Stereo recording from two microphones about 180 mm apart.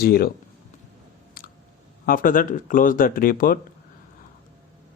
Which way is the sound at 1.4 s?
55° left (ahead or behind).